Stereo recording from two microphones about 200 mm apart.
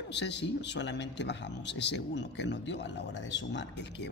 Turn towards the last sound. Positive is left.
turn(degrees=60)  # may be behind; listen again after turning